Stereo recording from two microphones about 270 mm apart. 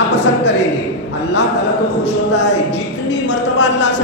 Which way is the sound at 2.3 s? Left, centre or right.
Left.